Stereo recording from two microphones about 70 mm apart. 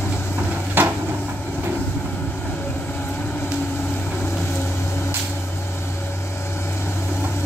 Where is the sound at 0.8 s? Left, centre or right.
Right.